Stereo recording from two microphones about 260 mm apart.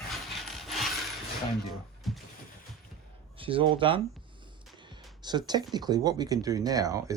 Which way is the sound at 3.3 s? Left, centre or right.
Centre.